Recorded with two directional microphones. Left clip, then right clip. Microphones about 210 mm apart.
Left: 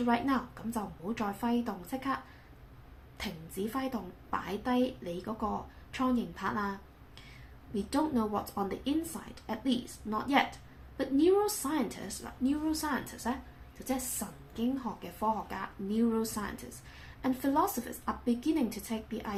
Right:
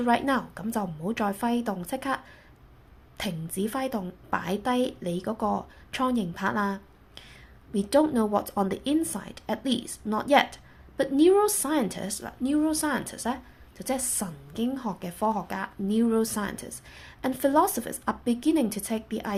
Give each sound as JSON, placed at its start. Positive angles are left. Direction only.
{"t": 0.0, "sound": "a woman's voice", "side_deg": -50}
{"t": 3.2, "sound": "a woman's voice", "side_deg": -50}